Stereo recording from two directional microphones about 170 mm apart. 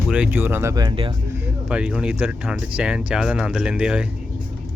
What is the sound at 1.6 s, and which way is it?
Speech, 5° right (ahead or behind).